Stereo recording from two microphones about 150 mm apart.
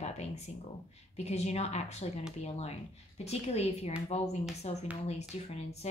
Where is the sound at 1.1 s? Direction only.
45° left (ahead or behind).